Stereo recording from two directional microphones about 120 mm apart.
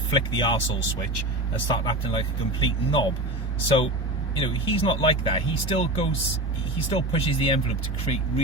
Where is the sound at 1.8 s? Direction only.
40° left (ahead or behind).